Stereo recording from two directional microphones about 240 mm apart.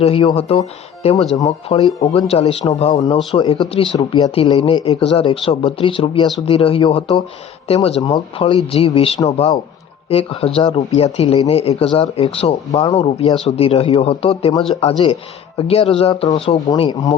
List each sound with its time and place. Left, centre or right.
0.0 s speech: left